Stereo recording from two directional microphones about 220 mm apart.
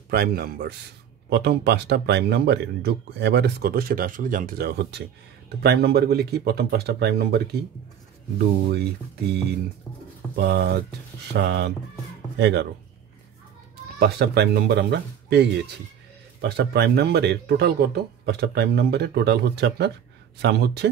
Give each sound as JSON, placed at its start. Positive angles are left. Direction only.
{"t": 0.1, "sound": "speech", "side_deg": -45}
{"t": 10.3, "sound": "speech", "side_deg": -45}
{"t": 13.9, "sound": "speech", "side_deg": -45}